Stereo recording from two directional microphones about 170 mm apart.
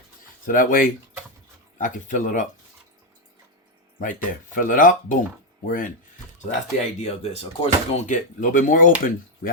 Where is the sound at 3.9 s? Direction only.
50° left (ahead or behind).